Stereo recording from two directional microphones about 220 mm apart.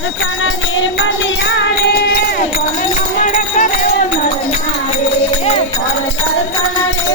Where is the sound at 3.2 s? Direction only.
35° left (ahead or behind).